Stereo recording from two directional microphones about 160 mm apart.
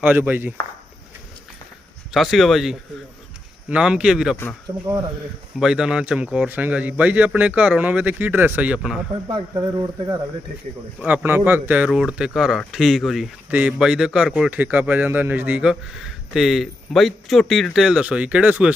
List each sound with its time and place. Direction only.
0.0 s speech: 10° right (ahead or behind)
2.1 s speech: centre (ahead or behind)
4.7 s speech: 35° right (ahead or behind)
5.5 s speech: 5° right (ahead or behind)
9.2 s speech: 35° right (ahead or behind)
11.0 s speech: 10° right (ahead or behind)